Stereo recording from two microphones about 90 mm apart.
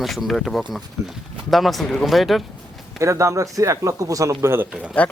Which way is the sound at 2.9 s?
35° right (ahead or behind).